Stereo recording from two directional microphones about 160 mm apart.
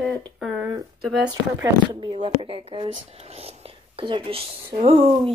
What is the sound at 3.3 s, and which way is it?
Whispering, 40° right (ahead or behind).